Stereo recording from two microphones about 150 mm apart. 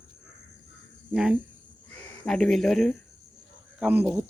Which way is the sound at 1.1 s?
5° right (ahead or behind).